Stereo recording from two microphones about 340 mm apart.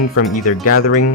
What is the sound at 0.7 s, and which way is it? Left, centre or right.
Speech, left.